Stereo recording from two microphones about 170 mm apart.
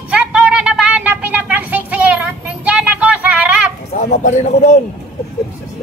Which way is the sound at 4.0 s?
45° left (ahead or behind).